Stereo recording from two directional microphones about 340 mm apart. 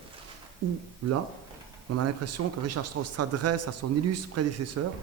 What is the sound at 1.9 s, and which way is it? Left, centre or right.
Speech, right.